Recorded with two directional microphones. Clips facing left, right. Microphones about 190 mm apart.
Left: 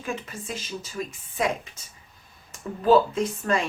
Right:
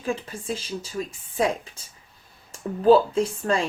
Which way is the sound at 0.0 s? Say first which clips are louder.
Right 4 dB; 30° right (ahead or behind).